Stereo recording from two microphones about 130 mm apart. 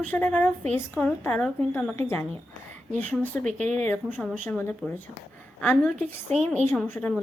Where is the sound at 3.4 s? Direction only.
70° right (ahead or behind).